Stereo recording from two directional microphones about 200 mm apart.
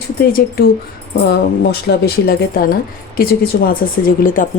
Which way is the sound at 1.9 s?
50° left (ahead or behind).